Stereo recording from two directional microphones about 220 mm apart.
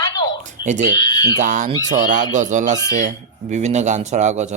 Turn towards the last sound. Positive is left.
turn(degrees=-30)  # may be behind; listen again after turning